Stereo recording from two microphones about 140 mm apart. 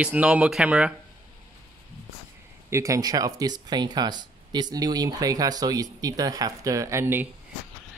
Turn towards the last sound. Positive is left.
turn(degrees=-20)  # may be behind; listen again after turning